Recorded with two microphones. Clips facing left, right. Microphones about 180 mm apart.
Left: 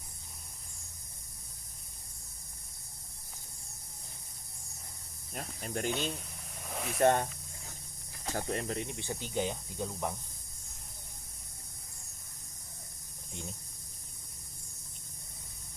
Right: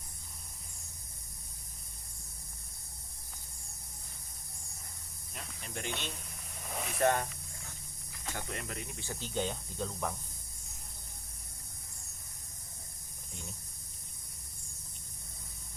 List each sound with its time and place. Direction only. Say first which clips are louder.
5.3 s speech: left 6 dB; 45° left (ahead or behind)
5.9 s speech: left 6 dB; centre (ahead or behind)
6.7 s vehicle: left 1 dB; centre (ahead or behind)
7.0 s speech: left 3 dB; 30° left (ahead or behind)
8.3 s speech: left 6 dB; 35° left (ahead or behind); by 10.2 s 20° left (ahead or behind)